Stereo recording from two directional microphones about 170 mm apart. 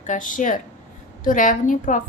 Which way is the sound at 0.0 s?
50° left (ahead or behind).